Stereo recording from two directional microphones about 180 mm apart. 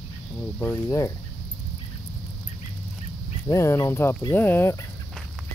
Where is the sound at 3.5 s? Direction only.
15° left (ahead or behind).